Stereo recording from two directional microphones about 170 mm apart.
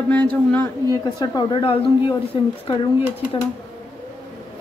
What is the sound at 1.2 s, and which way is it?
Speech, 25° left (ahead or behind).